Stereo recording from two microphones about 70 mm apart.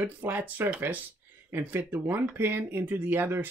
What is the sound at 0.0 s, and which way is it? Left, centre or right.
Speech, right.